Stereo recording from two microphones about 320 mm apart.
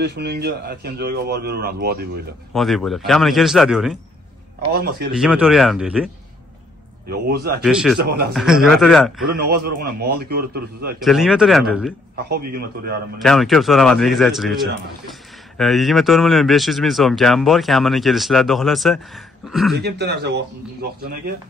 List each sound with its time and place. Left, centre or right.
0.0 s speech: right
2.5 s speech: centre
4.7 s speech: right
5.1 s speech: centre
7.1 s speech: right
7.6 s speech: centre
8.0 s speech: right
8.3 s speech: centre
9.3 s speech: right
11.0 s speech: centre
12.3 s speech: right
13.2 s speech: centre
19.8 s speech: right